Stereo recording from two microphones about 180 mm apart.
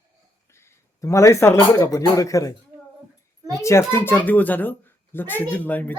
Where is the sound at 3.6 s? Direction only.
15° left (ahead or behind).